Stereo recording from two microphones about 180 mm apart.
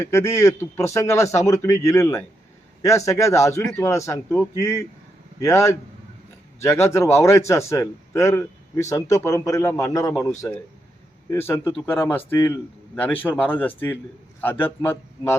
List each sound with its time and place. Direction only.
0.0 s a man's voice: 15° left (ahead or behind)
11.3 s a man's voice: 10° left (ahead or behind)